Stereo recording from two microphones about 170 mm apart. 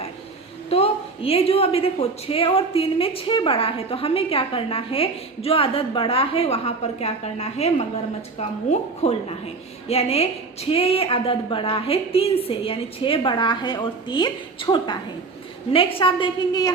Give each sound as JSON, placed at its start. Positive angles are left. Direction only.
{"t": 0.7, "sound": "a woman's voice", "side_deg": 35}